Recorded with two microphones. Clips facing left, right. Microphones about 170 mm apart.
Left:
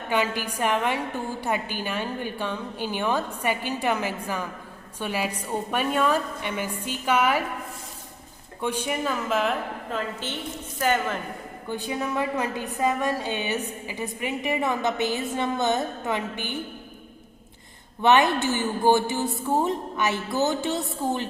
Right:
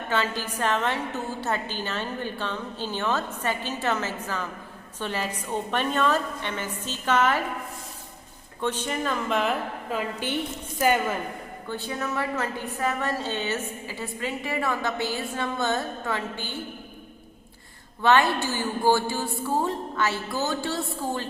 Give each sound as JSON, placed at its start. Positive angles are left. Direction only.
{"t": 0.1, "sound": "a woman's voice", "side_deg": 15}
{"t": 8.6, "sound": "speech", "side_deg": 10}
{"t": 10.8, "sound": "a woman's voice", "side_deg": -10}
{"t": 11.7, "sound": "a woman's voice", "side_deg": 15}
{"t": 18.0, "sound": "a woman's voice", "side_deg": 20}